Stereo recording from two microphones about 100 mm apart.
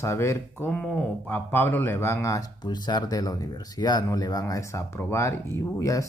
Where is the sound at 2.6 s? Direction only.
45° left (ahead or behind).